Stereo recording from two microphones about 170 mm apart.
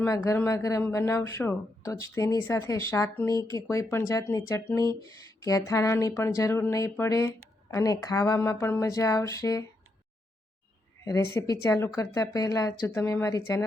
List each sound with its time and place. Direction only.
0.3 s speech: 20° left (ahead or behind)
11.0 s speech: 20° left (ahead or behind)